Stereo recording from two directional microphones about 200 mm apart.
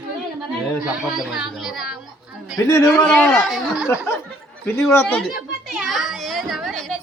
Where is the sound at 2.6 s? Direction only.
15° left (ahead or behind).